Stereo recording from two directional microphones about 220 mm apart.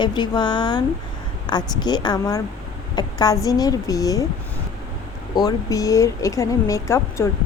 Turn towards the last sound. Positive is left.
turn(degrees=10)  # may be behind; listen again after turning